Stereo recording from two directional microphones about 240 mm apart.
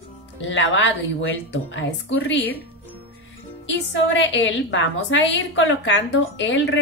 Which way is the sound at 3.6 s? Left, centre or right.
Left.